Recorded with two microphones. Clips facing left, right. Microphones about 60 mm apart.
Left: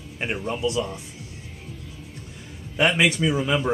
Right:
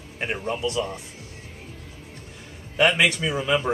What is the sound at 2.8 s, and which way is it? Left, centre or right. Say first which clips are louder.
Speech: even; centre.